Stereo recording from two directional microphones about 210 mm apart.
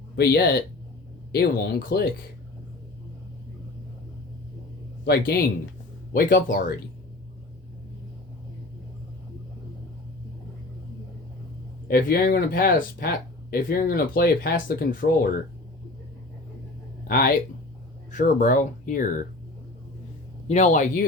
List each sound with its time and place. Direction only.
0.2 s speech: 50° left (ahead or behind)
5.0 s speech: 50° left (ahead or behind)
11.9 s speech: 45° left (ahead or behind)
17.1 s speech: 45° left (ahead or behind)
20.5 s speech: 35° left (ahead or behind)